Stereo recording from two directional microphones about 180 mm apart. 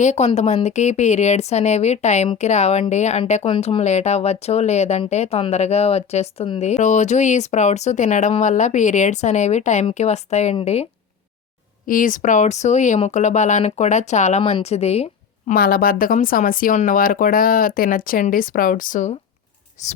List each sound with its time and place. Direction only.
0.0 s a woman's voice: 40° left (ahead or behind)
11.9 s a woman's voice: 50° left (ahead or behind)
15.5 s speech: 55° left (ahead or behind); by 19.9 s 40° left (ahead or behind)